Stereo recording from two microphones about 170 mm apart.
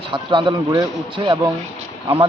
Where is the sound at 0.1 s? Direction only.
30° right (ahead or behind).